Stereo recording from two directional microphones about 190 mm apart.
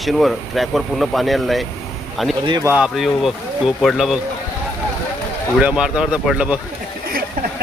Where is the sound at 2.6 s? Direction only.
5° right (ahead or behind).